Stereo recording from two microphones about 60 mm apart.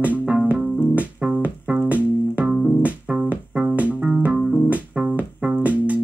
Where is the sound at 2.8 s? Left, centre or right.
Right.